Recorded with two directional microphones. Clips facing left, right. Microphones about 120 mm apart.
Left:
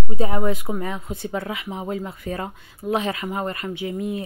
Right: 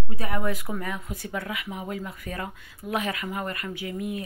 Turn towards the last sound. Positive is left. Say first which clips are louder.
# left 5 dB
turn(degrees=25)  # may be behind; listen again after turning